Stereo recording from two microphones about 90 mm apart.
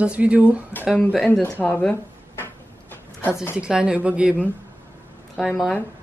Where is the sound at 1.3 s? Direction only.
20° left (ahead or behind).